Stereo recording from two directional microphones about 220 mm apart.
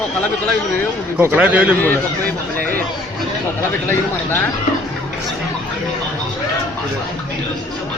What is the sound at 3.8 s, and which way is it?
Speech, 10° left (ahead or behind).